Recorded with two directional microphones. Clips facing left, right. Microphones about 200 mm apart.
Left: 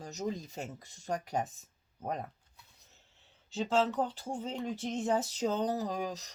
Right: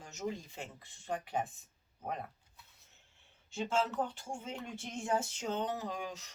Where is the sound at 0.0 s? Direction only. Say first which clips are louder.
Left 3 dB; 35° left (ahead or behind).